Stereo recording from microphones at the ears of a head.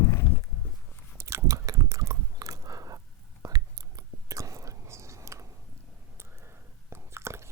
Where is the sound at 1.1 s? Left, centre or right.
Right.